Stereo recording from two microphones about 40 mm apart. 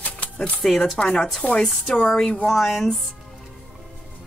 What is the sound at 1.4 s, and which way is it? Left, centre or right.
Speech, left.